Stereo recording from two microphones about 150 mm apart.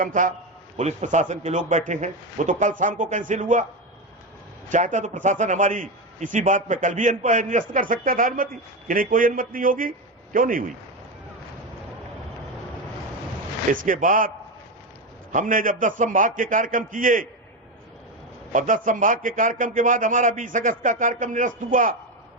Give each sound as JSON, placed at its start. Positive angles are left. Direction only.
{"t": 0.0, "sound": "a man's voice", "side_deg": -60}
{"t": 4.7, "sound": "a man's voice", "side_deg": -55}
{"t": 13.8, "sound": "a man's voice", "side_deg": -65}
{"t": 15.3, "sound": "a man's voice", "side_deg": -60}
{"t": 18.5, "sound": "a man's voice", "side_deg": -60}